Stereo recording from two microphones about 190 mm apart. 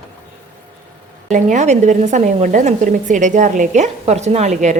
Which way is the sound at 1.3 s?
40° right (ahead or behind).